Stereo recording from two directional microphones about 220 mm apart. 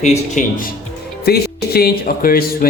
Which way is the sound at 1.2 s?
45° left (ahead or behind).